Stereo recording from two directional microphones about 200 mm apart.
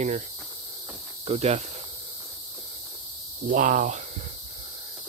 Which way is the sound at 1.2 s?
30° right (ahead or behind).